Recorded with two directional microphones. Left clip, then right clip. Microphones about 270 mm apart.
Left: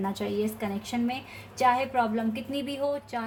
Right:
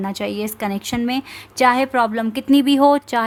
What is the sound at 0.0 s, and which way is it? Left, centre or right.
A woman's voice, right.